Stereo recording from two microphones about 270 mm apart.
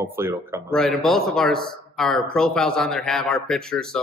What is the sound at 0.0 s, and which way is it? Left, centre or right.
Speech, centre.